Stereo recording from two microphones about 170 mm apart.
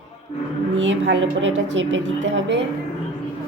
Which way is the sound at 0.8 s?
90° right.